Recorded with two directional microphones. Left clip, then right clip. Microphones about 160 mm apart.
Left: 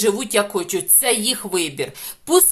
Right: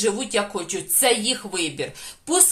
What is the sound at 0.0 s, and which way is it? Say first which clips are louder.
Speech: left 4 dB; 40° left (ahead or behind).